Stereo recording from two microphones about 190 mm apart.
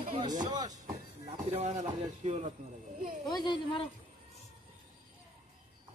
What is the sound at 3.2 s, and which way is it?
Speech, 25° left (ahead or behind).